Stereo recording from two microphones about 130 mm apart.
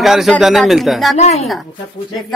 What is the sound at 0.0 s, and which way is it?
A man's voice, centre (ahead or behind).